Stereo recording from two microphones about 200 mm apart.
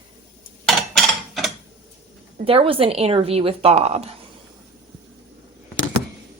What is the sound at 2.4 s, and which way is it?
Speech, 25° right (ahead or behind).